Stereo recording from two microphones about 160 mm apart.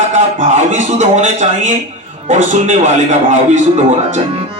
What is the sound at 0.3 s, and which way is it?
A man's voice, 50° right (ahead or behind).